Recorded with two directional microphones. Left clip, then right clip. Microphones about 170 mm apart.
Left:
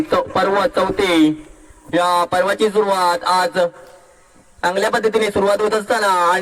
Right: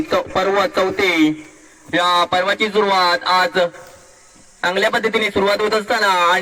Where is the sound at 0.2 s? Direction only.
45° left (ahead or behind).